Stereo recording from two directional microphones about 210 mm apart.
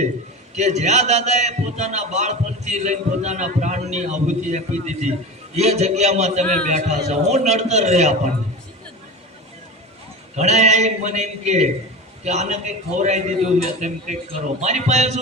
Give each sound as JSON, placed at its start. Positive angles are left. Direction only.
{"t": 0.5, "sound": "a man's voice", "side_deg": -35}
{"t": 10.3, "sound": "a man's voice", "side_deg": -35}